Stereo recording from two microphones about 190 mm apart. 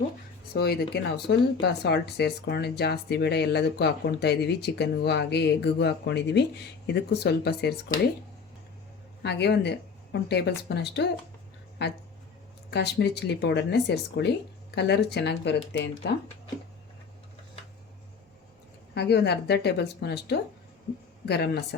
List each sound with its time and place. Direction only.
0.5 s speech: 55° left (ahead or behind)
9.2 s speech: 60° left (ahead or behind)
18.9 s speech: 60° left (ahead or behind)